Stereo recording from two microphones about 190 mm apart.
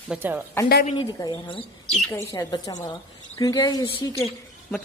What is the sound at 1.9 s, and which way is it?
A woman's voice, 5° left (ahead or behind).